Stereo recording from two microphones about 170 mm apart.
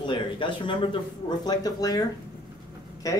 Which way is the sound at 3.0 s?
20° left (ahead or behind).